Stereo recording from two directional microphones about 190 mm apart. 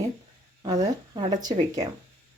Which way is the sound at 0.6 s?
25° right (ahead or behind).